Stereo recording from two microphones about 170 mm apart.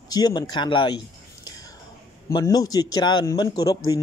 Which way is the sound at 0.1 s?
25° left (ahead or behind).